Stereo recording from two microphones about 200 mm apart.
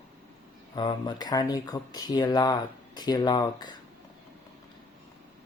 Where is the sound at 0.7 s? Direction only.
20° left (ahead or behind).